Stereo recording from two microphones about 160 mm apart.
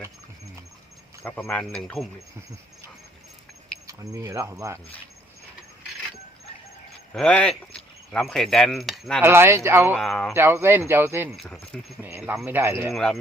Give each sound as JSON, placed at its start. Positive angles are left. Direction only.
{"t": 1.2, "sound": "speech", "side_deg": 15}
{"t": 1.5, "sound": "speech", "side_deg": 5}
{"t": 3.8, "sound": "speech", "side_deg": -20}
{"t": 7.1, "sound": "speech", "side_deg": 5}
{"t": 9.2, "sound": "speech", "side_deg": -15}
{"t": 10.0, "sound": "speech", "side_deg": 0}
{"t": 10.3, "sound": "speech", "side_deg": -15}
{"t": 11.4, "sound": "speech", "side_deg": 5}
{"t": 12.5, "sound": "speech", "side_deg": -15}
{"t": 12.9, "sound": "speech", "side_deg": 5}